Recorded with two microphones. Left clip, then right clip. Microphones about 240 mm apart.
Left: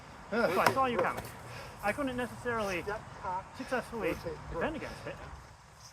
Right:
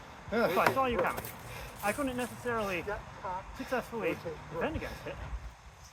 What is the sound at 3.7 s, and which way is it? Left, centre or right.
Speech, centre.